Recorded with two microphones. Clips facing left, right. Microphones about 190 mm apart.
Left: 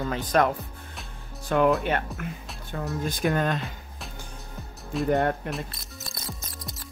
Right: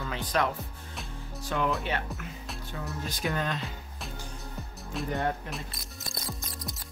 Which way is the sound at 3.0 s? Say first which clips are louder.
Left 6 dB; 50° left (ahead or behind).